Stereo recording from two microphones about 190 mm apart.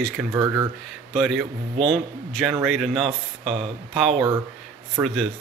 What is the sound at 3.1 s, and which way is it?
Speech, 30° right (ahead or behind).